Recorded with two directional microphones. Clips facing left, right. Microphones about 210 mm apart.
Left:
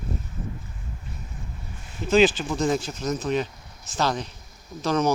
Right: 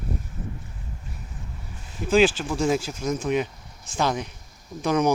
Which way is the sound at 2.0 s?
10° right (ahead or behind).